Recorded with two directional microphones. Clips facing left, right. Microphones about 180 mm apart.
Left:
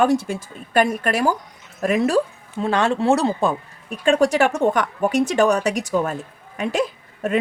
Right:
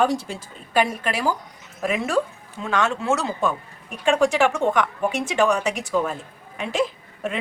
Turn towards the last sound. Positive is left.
turn(degrees=45)  # may be behind; listen again after turning